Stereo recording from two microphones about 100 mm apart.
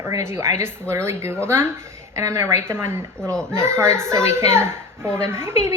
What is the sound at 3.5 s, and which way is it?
A child's voice, 25° right (ahead or behind).